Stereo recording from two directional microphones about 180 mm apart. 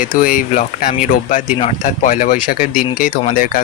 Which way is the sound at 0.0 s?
50° left (ahead or behind).